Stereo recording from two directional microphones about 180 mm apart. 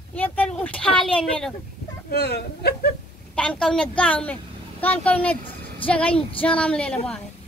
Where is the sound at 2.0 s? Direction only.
60° left (ahead or behind).